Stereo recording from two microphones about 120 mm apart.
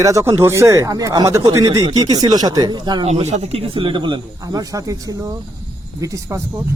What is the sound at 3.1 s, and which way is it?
A man's voice, 65° right (ahead or behind).